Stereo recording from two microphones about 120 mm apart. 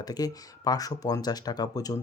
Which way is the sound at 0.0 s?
30° left (ahead or behind).